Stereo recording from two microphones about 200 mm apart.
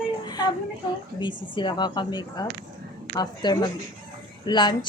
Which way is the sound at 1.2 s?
25° left (ahead or behind).